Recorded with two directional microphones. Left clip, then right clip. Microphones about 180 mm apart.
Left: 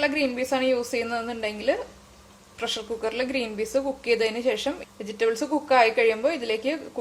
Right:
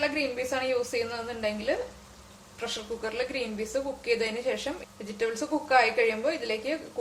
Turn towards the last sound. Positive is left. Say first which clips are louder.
# left 4 dB
turn(degrees=50)  # may be behind; listen again after turning